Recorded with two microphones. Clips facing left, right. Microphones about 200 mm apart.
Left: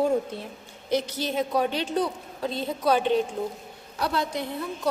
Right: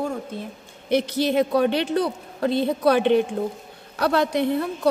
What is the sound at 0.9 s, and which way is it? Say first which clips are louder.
A man's voice: right 6 dB; 65° right (ahead or behind).